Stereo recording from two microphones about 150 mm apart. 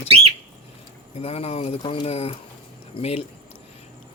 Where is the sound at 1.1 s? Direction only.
45° left (ahead or behind).